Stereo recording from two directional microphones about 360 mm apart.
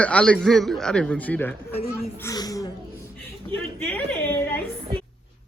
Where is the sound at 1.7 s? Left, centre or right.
Centre.